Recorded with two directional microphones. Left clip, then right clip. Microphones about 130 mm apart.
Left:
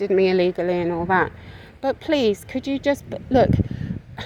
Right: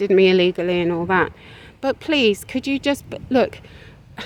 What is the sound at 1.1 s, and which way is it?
Speech, 40° right (ahead or behind).